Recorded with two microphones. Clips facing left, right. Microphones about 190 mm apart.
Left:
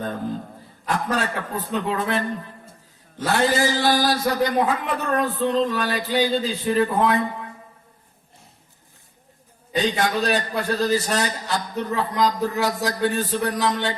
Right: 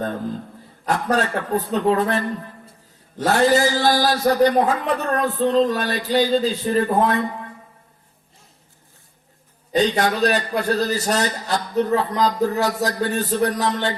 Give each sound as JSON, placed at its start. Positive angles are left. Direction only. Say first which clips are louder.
{"t": 1.1, "sound": "a man's voice", "louder": "right 5 dB", "side_deg": -40}
{"t": 9.7, "sound": "a man's voice", "louder": "right 3 dB", "side_deg": -40}